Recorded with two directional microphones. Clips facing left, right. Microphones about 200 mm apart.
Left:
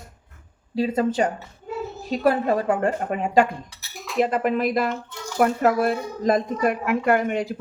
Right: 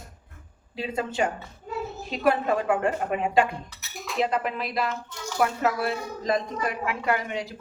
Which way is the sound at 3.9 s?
Centre (ahead or behind).